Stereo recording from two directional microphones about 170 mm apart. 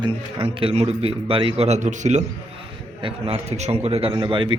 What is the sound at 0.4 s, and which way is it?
A man's voice, 35° right (ahead or behind).